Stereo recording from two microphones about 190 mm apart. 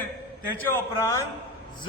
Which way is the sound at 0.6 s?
15° left (ahead or behind).